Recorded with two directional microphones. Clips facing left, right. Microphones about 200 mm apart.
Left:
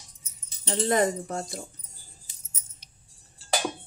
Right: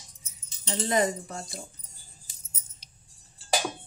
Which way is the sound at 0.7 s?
55° left (ahead or behind).